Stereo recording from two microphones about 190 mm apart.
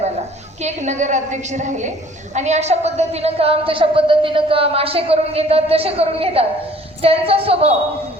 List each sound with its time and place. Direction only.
0.6 s a woman's voice: 35° right (ahead or behind)